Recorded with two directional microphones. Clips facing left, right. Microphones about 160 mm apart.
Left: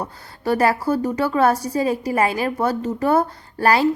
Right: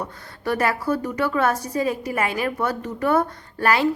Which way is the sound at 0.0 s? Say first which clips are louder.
Left 3 dB; 30° left (ahead or behind).